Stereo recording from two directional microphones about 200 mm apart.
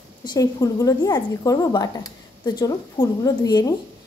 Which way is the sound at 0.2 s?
20° left (ahead or behind).